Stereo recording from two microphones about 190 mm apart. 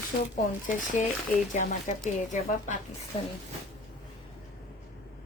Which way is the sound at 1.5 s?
40° left (ahead or behind).